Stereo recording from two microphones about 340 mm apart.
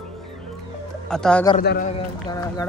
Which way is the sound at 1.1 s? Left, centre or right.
Centre.